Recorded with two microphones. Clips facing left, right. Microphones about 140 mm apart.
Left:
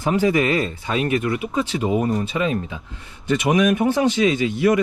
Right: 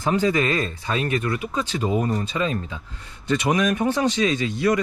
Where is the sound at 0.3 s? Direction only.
20° left (ahead or behind).